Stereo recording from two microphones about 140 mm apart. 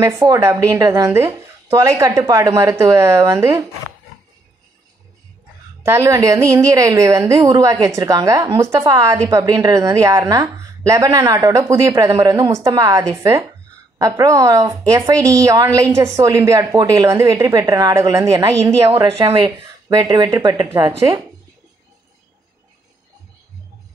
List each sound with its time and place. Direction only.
0.0 s a woman's voice: 20° right (ahead or behind)
5.8 s a woman's voice: 20° right (ahead or behind)
19.1 s speech: 40° right (ahead or behind)
20.6 s a woman's voice: 20° right (ahead or behind)